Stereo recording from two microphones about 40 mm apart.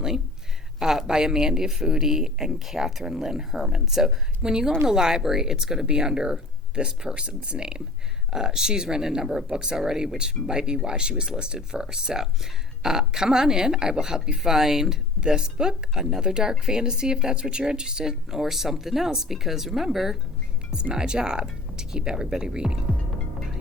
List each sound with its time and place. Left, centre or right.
0.8 s speech: centre
20.9 s speech: centre